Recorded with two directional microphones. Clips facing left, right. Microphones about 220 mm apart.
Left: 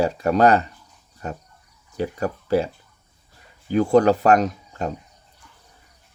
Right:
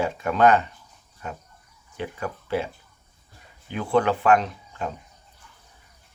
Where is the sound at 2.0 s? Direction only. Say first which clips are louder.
Left 6 dB; 40° left (ahead or behind).